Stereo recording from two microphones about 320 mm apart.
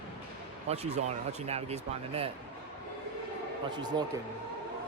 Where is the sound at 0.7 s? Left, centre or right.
Centre.